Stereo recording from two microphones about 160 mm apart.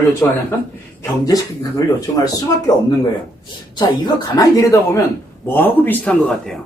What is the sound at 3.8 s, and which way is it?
A man's voice, 25° left (ahead or behind).